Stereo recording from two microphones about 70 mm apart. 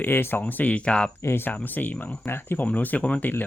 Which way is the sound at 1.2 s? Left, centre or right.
Left.